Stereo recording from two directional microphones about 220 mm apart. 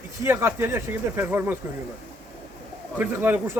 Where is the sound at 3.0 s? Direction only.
10° right (ahead or behind).